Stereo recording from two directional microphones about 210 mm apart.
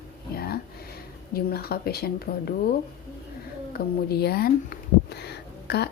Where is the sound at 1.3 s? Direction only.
45° left (ahead or behind).